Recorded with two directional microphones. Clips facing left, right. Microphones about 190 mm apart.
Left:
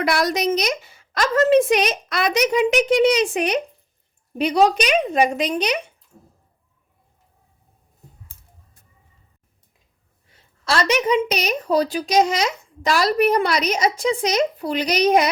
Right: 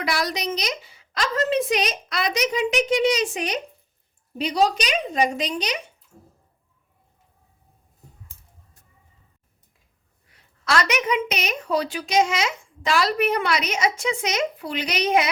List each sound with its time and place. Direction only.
0.0 s a woman's voice: 50° left (ahead or behind)
10.3 s a woman's voice: 30° left (ahead or behind)